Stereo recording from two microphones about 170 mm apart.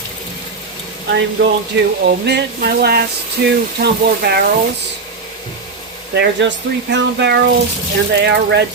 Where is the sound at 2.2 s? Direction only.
75° right (ahead or behind).